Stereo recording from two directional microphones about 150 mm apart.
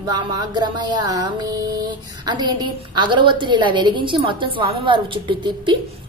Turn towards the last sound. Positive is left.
turn(degrees=-30)  # may be behind; listen again after turning